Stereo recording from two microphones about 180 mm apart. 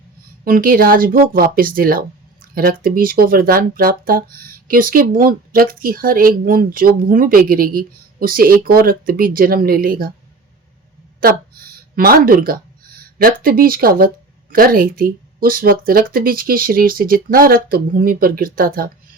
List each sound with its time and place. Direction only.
0.4 s speech: 50° right (ahead or behind)
11.2 s speech: 55° right (ahead or behind)